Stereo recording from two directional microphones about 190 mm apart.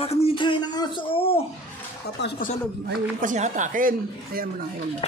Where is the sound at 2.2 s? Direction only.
60° left (ahead or behind).